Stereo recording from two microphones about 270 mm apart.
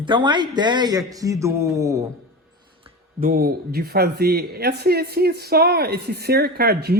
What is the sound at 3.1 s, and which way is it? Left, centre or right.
Speech, right.